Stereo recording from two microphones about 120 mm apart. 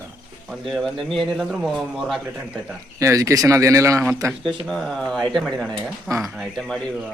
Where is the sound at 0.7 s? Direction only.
Centre (ahead or behind).